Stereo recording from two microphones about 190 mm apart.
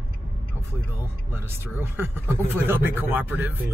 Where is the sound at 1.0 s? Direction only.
10° right (ahead or behind).